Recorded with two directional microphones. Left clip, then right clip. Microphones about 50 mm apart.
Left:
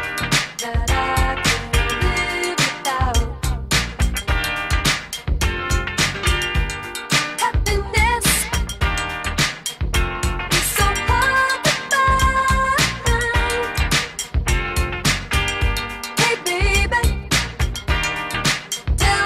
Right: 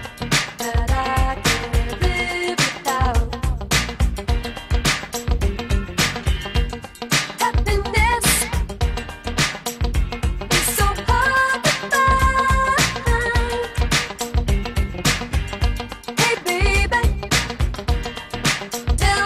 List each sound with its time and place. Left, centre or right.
0.3 s music: right